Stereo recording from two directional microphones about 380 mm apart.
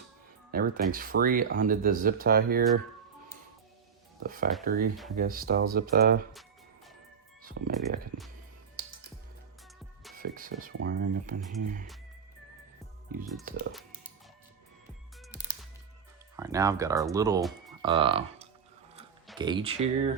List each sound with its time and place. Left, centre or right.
0.5 s speech: right
4.2 s speech: right
7.6 s speech: right
10.2 s speech: right
13.4 s speech: right
16.3 s speech: centre